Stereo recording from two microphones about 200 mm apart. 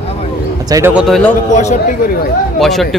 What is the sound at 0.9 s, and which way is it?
Speech, centre (ahead or behind).